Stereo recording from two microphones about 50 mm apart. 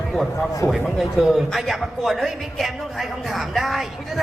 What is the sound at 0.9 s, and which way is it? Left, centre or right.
A woman's voice, centre.